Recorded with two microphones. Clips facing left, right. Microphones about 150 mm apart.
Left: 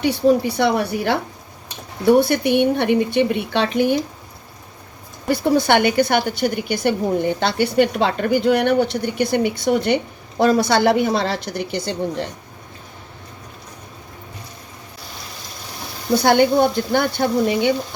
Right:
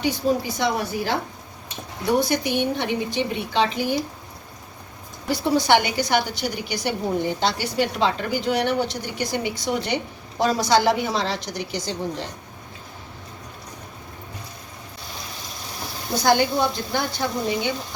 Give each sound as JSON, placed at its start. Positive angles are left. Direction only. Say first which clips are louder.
{"t": 0.0, "sound": "a woman's voice", "louder": "left 6 dB", "side_deg": 65}
{"t": 2.2, "sound": "a woman's voice", "louder": "left 6 dB", "side_deg": 60}
{"t": 5.3, "sound": "a woman's voice", "louder": "left 3 dB", "side_deg": 55}
{"t": 16.1, "sound": "a woman's voice", "louder": "left 5 dB", "side_deg": 60}